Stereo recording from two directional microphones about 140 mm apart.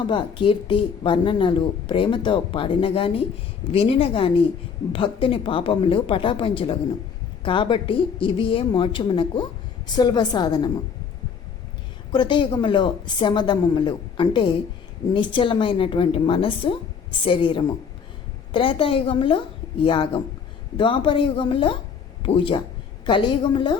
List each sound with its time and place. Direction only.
0.0 s speech: 35° left (ahead or behind)
12.1 s speech: 35° left (ahead or behind)